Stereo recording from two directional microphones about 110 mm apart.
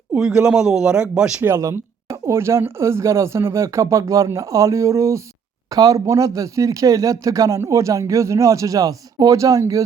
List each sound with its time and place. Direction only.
0.1 s speech: 5° right (ahead or behind)
1.4 s speech: 20° right (ahead or behind)